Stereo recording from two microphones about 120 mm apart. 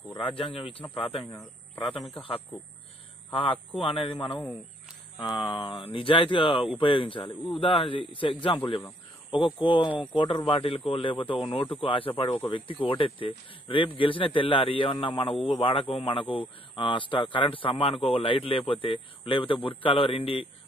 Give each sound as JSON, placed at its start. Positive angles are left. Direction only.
{"t": 0.2, "sound": "a man's voice", "side_deg": 45}
{"t": 1.2, "sound": "a man's voice", "side_deg": 20}
{"t": 3.8, "sound": "a man's voice", "side_deg": 50}